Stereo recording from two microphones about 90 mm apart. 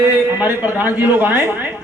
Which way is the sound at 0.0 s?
20° right (ahead or behind).